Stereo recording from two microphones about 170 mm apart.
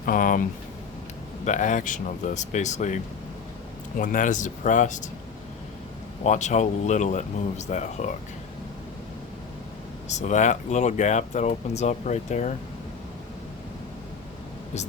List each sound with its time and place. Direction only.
0.0 s speech: 55° left (ahead or behind)
1.5 s speech: 45° left (ahead or behind)
6.2 s speech: 45° left (ahead or behind)
10.1 s speech: 45° left (ahead or behind)